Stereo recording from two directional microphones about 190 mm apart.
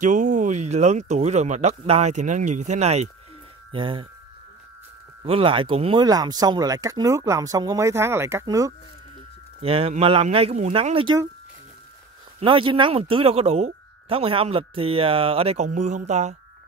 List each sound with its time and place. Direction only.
0.0 s speech: 40° right (ahead or behind)
5.2 s speech: 30° right (ahead or behind)
9.6 s speech: 30° right (ahead or behind)
12.4 s speech: 25° right (ahead or behind)